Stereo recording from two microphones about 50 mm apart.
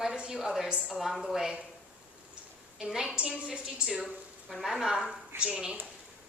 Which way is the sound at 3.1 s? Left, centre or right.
Right.